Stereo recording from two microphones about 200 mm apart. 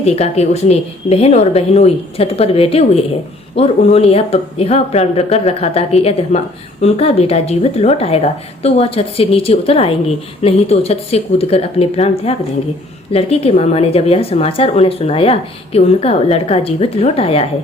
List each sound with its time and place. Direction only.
0.0 s a woman's voice: 30° left (ahead or behind)